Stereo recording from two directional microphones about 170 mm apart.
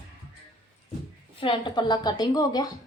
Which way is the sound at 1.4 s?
30° left (ahead or behind).